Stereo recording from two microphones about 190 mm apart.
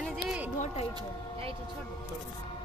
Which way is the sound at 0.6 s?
35° left (ahead or behind).